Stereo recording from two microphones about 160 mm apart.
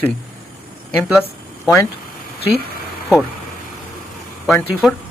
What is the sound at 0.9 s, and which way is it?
Speech, 5° right (ahead or behind).